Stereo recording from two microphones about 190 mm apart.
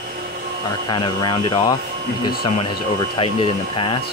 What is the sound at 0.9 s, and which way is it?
Speech, 25° left (ahead or behind).